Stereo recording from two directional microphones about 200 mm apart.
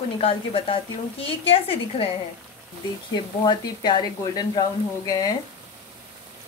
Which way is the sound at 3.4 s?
20° left (ahead or behind).